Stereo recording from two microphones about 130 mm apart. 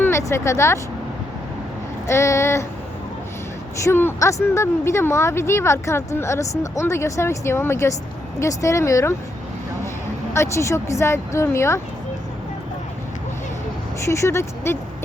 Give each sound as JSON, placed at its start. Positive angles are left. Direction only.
{"t": 0.0, "sound": "speech", "side_deg": 20}
{"t": 2.0, "sound": "a woman's voice", "side_deg": 20}
{"t": 3.8, "sound": "a woman's voice", "side_deg": 20}
{"t": 10.3, "sound": "a woman's voice", "side_deg": 20}
{"t": 14.0, "sound": "a woman's voice", "side_deg": 20}